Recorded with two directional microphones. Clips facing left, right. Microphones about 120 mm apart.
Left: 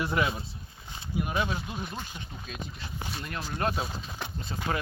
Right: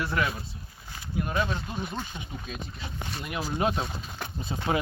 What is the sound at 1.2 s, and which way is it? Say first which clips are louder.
Speech: right 1 dB; 10° left (ahead or behind).